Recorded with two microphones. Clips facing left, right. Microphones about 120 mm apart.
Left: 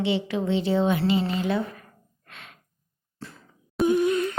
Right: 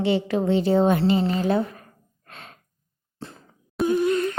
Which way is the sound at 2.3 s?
35° right (ahead or behind).